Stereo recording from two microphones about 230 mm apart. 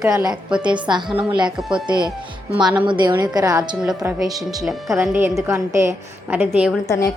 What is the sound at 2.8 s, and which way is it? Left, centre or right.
Speech, right.